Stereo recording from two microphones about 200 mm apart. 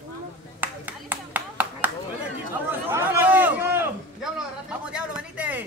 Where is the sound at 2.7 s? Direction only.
10° right (ahead or behind).